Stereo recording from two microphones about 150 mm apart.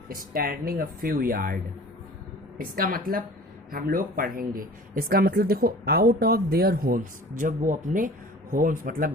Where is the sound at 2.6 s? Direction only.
70° right (ahead or behind).